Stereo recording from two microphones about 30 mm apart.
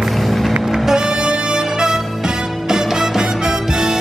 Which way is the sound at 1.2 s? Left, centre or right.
Right.